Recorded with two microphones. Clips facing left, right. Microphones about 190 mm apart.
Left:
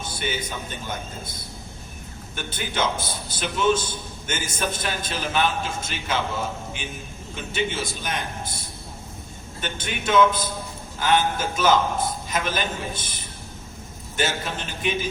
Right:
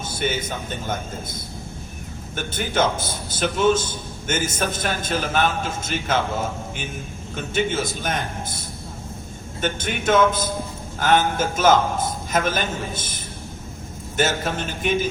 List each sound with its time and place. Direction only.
0.0 s a man's voice: 50° right (ahead or behind)
7.3 s a man's voice: 50° right (ahead or behind)
14.2 s a man's voice: 45° right (ahead or behind)